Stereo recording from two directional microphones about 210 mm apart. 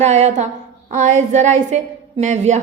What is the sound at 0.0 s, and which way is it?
A woman's voice, 35° right (ahead or behind).